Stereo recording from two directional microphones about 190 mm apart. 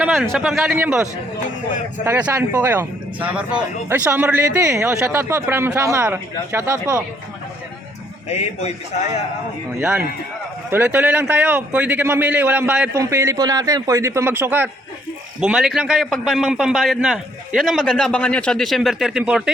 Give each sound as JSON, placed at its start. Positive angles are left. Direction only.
{"t": 0.0, "sound": "a man's voice", "side_deg": 0}
{"t": 2.0, "sound": "speech", "side_deg": -10}
{"t": 8.3, "sound": "a man's voice", "side_deg": 35}
{"t": 10.7, "sound": "a man's voice", "side_deg": -10}